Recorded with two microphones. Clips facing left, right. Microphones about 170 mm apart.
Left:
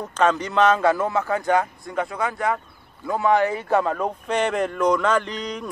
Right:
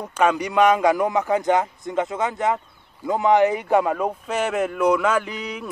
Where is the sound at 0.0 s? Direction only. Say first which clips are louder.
Even; 10° right (ahead or behind).